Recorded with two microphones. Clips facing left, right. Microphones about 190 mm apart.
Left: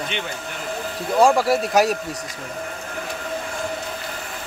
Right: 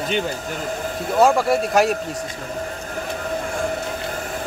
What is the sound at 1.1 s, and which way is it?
Speech, centre (ahead or behind).